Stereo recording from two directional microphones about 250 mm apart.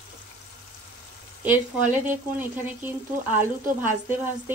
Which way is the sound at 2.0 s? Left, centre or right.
Centre.